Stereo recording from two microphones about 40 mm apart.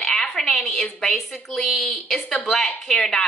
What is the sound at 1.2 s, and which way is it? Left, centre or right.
A woman's voice, centre.